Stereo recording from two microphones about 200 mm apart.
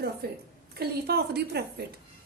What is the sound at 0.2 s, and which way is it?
A woman's voice, 55° right (ahead or behind).